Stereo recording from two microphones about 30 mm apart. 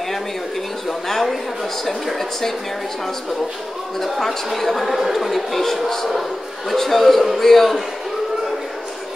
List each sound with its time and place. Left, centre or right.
0.8 s a sound: centre
1.9 s speech: centre
4.0 s speech: centre